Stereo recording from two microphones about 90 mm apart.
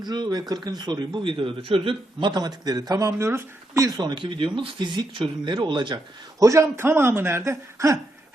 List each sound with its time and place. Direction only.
0.0 s a man's voice: 50° right (ahead or behind); by 2.3 s 90° right
2.3 s speech: 50° right (ahead or behind); by 3.8 s 30° right (ahead or behind)
3.8 s speech: 50° right (ahead or behind)
6.4 s speech: 35° right (ahead or behind)